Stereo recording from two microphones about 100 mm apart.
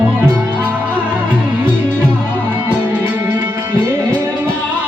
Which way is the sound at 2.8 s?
15° right (ahead or behind).